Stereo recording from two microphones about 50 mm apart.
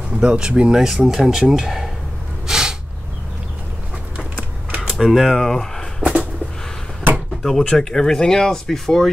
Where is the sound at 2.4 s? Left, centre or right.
Centre.